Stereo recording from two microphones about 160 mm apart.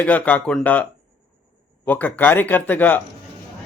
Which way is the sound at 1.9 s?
10° left (ahead or behind).